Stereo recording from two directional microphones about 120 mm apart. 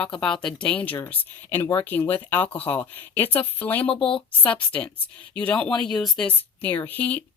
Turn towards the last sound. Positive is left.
turn(degrees=15)  # may be behind; listen again after turning